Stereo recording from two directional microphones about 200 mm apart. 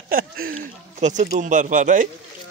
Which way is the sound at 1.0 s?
35° right (ahead or behind).